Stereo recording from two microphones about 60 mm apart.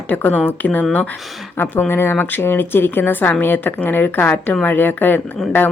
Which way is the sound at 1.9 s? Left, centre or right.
Left.